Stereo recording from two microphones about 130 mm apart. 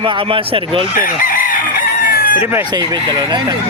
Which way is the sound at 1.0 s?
90° left.